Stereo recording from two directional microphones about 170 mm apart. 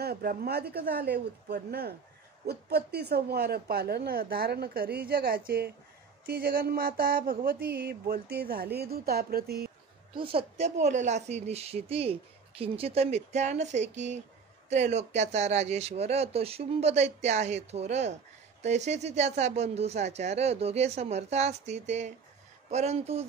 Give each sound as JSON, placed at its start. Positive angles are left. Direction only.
{"t": 0.0, "sound": "a woman's voice", "side_deg": -65}
{"t": 6.2, "sound": "a sound", "side_deg": -60}
{"t": 10.3, "sound": "a woman's voice", "side_deg": -40}